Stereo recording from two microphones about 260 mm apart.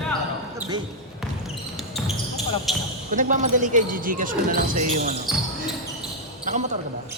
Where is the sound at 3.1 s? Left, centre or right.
Right.